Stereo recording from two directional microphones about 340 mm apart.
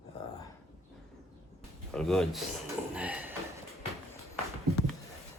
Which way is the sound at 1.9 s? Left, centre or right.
Centre.